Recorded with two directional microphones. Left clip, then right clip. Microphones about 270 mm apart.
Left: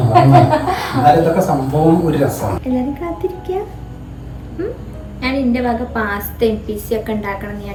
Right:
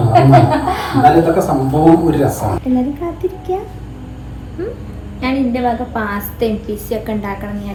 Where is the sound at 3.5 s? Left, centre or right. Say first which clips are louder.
Right 1 dB; centre.